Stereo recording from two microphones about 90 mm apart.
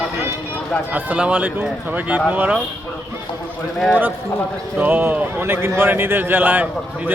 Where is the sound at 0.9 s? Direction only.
20° right (ahead or behind).